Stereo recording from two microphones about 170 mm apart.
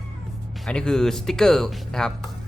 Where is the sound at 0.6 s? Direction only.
5° left (ahead or behind).